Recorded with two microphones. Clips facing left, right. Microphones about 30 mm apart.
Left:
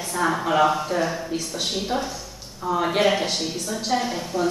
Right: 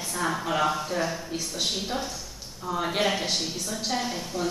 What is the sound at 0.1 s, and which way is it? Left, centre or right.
Speech, centre.